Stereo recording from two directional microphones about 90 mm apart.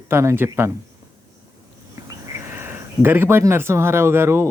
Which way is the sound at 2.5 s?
25° right (ahead or behind).